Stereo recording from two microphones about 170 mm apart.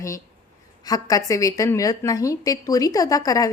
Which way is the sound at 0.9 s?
20° left (ahead or behind).